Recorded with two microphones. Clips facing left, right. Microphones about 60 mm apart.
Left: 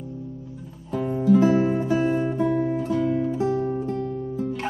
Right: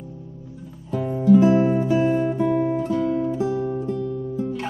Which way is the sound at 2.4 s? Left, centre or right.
Centre.